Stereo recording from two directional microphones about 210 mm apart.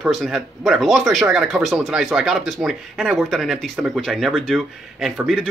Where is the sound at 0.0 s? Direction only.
Centre (ahead or behind).